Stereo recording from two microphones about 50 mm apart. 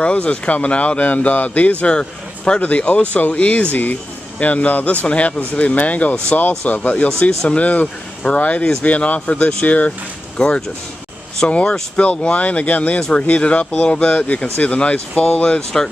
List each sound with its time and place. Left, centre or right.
0.0 s speech: left
2.6 s speech: left
9.7 s speech: left; by 15.9 s centre